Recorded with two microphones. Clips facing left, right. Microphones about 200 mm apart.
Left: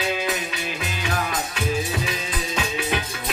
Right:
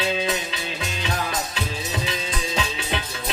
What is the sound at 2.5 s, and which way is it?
Music, 25° right (ahead or behind).